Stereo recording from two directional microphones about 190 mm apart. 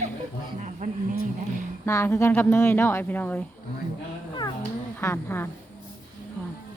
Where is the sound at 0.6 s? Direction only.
40° right (ahead or behind).